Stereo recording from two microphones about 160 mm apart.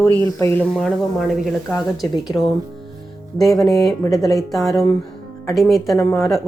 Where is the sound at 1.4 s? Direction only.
5° right (ahead or behind).